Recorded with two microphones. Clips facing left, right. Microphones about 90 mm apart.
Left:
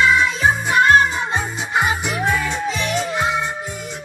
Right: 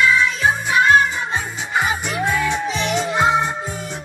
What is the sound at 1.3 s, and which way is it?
Music, 5° left (ahead or behind).